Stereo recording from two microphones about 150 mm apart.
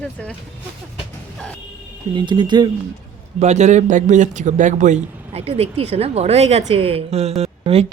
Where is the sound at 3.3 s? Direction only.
50° right (ahead or behind).